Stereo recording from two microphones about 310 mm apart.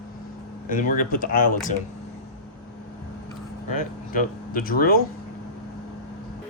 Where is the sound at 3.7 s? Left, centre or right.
Left.